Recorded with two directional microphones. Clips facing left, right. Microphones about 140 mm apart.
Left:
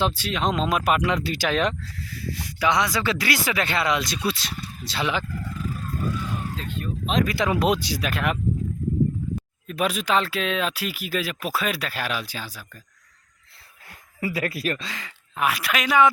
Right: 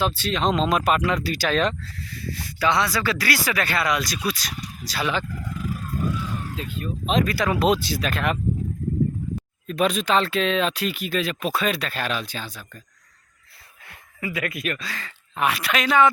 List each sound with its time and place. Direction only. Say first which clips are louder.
0.1 s speech: right 2 dB; 10° left (ahead or behind)
5.5 s vehicle: right 3 dB; centre (ahead or behind)
7.3 s speech: right 1 dB; 20° left (ahead or behind)
9.6 s speech: right 3 dB; 10° left (ahead or behind)
13.8 s speech: left 3 dB; 35° left (ahead or behind)
14.8 s speech: right 1 dB; 15° left (ahead or behind)
15.4 s a woman's voice: right 1 dB; 5° left (ahead or behind)